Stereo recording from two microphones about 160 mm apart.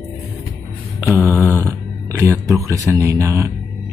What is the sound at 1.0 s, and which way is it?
Speech, 15° right (ahead or behind).